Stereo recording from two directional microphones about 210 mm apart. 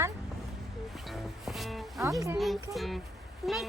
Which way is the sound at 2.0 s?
15° right (ahead or behind).